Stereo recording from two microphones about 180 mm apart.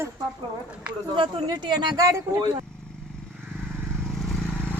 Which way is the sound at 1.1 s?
25° right (ahead or behind).